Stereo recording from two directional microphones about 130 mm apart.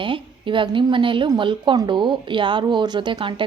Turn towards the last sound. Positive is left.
turn(degrees=-40)  # may be behind; listen again after turning